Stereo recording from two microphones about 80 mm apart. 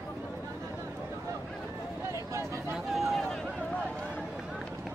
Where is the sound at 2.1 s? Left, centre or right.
Right.